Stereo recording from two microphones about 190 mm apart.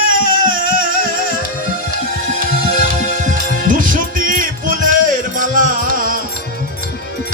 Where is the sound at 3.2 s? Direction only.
45° right (ahead or behind).